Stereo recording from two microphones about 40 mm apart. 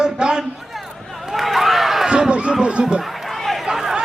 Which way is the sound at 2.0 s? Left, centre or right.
Right.